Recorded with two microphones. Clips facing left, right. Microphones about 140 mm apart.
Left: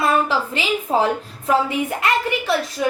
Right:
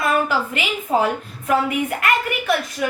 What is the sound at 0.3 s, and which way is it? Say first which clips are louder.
A woman's voice: left 1 dB; 30° left (ahead or behind).